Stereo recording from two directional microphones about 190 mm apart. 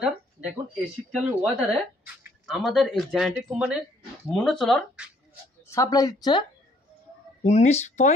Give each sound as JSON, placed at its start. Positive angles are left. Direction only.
{"t": 1.1, "sound": "speech", "side_deg": 0}
{"t": 5.7, "sound": "speech", "side_deg": 20}
{"t": 7.4, "sound": "speech", "side_deg": 35}